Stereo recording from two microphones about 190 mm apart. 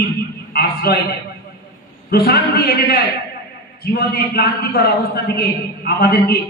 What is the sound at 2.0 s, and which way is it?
A man's voice, 55° left (ahead or behind).